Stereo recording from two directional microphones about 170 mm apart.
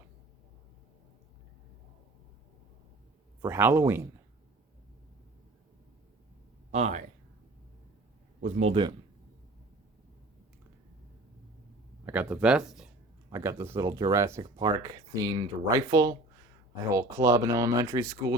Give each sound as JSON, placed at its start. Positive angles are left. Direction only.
{"t": 3.4, "sound": "speech", "side_deg": -15}
{"t": 6.7, "sound": "speech", "side_deg": -40}
{"t": 8.4, "sound": "speech", "side_deg": -45}
{"t": 8.7, "sound": "speech", "side_deg": -25}
{"t": 12.0, "sound": "speech", "side_deg": -10}
{"t": 13.3, "sound": "speech", "side_deg": -15}